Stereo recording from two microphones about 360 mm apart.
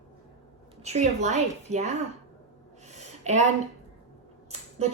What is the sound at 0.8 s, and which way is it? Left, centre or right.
A woman's voice, centre.